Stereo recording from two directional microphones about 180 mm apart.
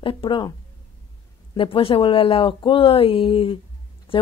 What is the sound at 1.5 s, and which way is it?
A woman's voice, 30° left (ahead or behind).